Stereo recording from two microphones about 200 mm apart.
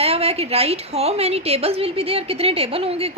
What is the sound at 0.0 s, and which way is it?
A woman's voice, 30° right (ahead or behind).